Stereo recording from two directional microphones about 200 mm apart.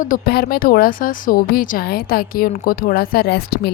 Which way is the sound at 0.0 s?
45° left (ahead or behind).